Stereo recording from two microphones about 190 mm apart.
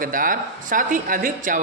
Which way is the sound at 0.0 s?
45° right (ahead or behind).